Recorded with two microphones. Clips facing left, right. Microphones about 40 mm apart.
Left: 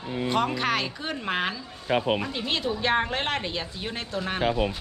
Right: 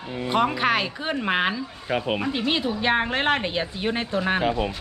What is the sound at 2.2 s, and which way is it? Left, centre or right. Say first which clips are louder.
Speech: right 4 dB; centre.